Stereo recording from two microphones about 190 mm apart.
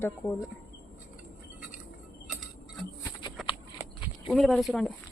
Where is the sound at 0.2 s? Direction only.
Centre (ahead or behind).